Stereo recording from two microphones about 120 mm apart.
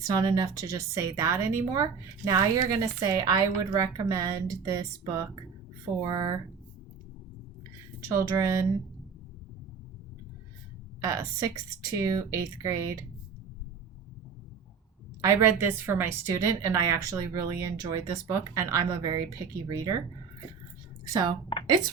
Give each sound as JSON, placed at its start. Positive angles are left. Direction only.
{"t": 0.0, "sound": "a woman's voice", "side_deg": -30}
{"t": 8.0, "sound": "a woman's voice", "side_deg": -25}
{"t": 11.0, "sound": "a woman's voice", "side_deg": -25}
{"t": 15.2, "sound": "a woman's voice", "side_deg": -25}
{"t": 21.1, "sound": "speech", "side_deg": -30}